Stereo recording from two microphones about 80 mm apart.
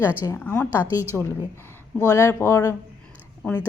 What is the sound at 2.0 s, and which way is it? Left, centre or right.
Speech, left.